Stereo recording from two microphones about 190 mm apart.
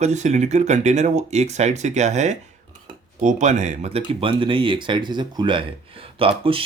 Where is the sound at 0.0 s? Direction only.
40° right (ahead or behind).